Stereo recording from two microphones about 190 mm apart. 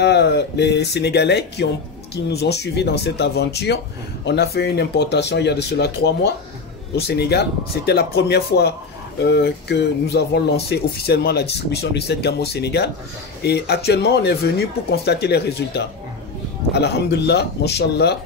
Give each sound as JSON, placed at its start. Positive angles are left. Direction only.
{"t": 0.0, "sound": "speech", "side_deg": 65}